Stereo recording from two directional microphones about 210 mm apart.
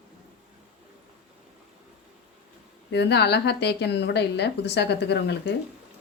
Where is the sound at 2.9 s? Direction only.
50° left (ahead or behind).